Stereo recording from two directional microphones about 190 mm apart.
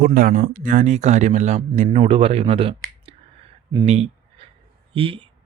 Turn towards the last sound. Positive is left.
turn(degrees=-30)  # may be behind; listen again after turning